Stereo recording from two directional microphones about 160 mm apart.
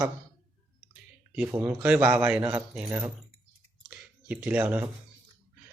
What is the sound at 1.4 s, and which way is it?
A man's voice, 10° right (ahead or behind).